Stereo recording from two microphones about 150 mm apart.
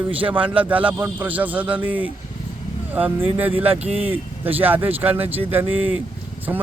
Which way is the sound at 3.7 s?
40° right (ahead or behind).